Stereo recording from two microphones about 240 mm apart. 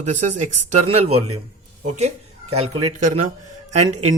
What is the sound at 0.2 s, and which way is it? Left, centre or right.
Speech, right.